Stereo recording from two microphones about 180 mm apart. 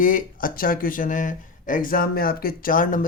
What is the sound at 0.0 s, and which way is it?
A man's voice, 50° left (ahead or behind).